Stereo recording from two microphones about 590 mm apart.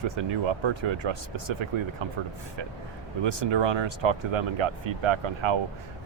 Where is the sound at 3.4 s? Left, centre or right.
Right.